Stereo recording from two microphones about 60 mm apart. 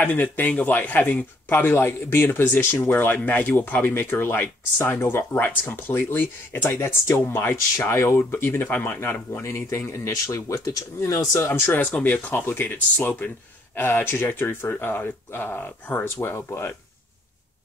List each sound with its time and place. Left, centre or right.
0.0 s speech: left
3.9 s speech: left
9.0 s speech: left
10.2 s speech: left
11.0 s speech: left
11.4 s speech: left
11.8 s speech: left
13.7 s speech: left
16.2 s speech: left